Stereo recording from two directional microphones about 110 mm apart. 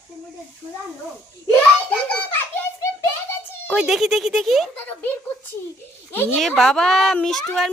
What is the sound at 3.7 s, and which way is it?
Speech, 5° right (ahead or behind).